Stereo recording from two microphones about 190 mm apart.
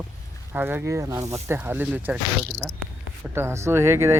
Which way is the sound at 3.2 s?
15° right (ahead or behind).